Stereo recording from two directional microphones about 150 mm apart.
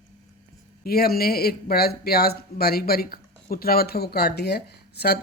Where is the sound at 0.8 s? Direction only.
90° left.